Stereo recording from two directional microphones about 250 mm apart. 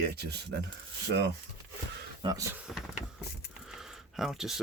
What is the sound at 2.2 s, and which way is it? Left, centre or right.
Speech, centre.